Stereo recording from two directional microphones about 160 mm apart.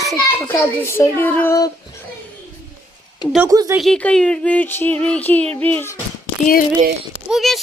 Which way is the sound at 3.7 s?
Centre (ahead or behind).